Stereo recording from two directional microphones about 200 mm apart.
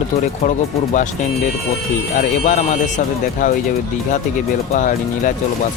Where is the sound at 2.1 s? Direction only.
40° left (ahead or behind).